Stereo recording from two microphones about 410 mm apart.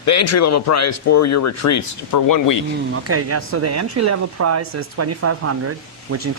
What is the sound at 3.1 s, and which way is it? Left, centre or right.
Speech, right.